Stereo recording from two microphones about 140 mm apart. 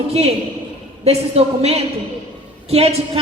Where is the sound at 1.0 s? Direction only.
45° right (ahead or behind).